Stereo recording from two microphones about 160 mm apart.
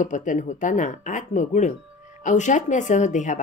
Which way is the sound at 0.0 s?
50° left (ahead or behind).